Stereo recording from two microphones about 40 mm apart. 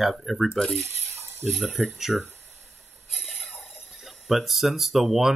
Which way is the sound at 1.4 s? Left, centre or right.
Centre.